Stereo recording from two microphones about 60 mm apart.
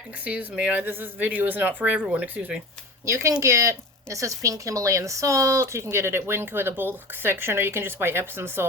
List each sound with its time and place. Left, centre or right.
0.3 s speech: right
0.8 s speech: right
3.1 s a woman's voice: right